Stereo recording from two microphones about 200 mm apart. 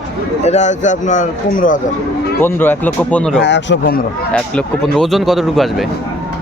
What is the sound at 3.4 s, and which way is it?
Speech, 60° left (ahead or behind).